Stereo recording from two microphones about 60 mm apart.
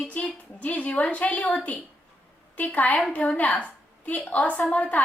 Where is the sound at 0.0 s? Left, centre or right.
Left.